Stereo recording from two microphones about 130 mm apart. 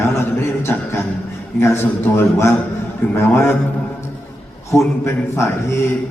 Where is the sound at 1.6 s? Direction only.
20° left (ahead or behind).